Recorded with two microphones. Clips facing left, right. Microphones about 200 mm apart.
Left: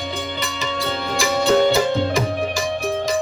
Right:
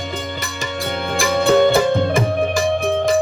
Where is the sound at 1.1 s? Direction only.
55° right (ahead or behind).